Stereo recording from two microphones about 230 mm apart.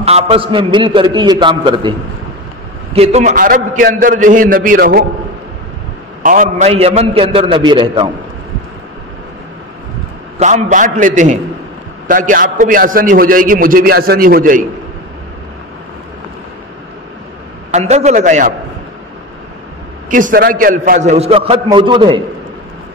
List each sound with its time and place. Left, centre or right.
0.0 s a man's voice: right
6.2 s a man's voice: right
10.4 s a man's voice: right
17.6 s a man's voice: right
20.1 s a man's voice: right